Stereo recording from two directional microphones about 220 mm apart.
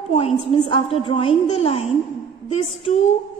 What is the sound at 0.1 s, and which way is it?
A woman's voice, 25° left (ahead or behind).